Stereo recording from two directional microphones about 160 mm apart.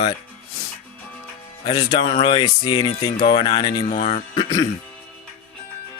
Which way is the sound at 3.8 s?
40° left (ahead or behind).